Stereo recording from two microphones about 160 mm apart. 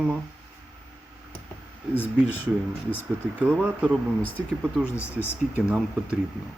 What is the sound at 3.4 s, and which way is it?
Speech, 10° right (ahead or behind).